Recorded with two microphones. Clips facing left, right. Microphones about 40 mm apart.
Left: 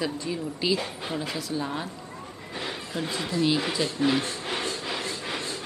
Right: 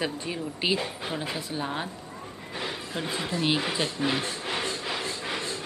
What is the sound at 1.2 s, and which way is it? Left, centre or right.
Speech, centre.